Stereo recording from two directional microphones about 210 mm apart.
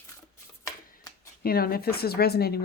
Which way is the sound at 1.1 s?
20° left (ahead or behind).